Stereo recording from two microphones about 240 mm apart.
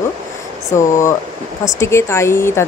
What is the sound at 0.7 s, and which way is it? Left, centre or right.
Speech, centre.